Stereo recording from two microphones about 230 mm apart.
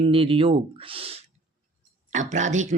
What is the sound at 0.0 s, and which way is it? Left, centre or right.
Speech, right.